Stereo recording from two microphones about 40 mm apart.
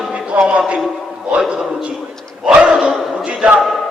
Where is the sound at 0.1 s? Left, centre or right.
Right.